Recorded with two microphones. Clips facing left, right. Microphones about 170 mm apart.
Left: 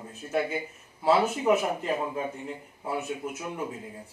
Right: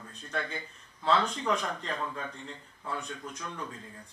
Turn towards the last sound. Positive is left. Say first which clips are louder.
# left 6 dB
turn(degrees=15)  # may be behind; listen again after turning